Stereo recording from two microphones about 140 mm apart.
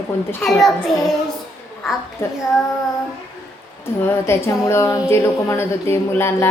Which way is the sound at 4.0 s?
20° left (ahead or behind).